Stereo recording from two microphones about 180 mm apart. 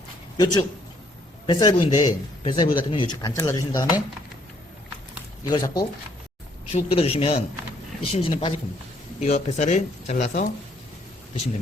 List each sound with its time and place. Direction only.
0.3 s speech: 20° left (ahead or behind)
5.5 s speech: 20° left (ahead or behind)
6.7 s speech: 35° left (ahead or behind)